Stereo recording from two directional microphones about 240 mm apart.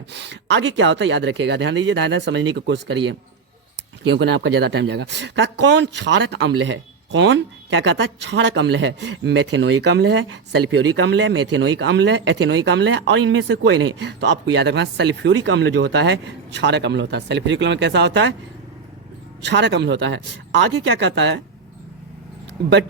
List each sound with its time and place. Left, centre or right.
0.1 s speech: right
4.0 s speech: right
19.4 s speech: right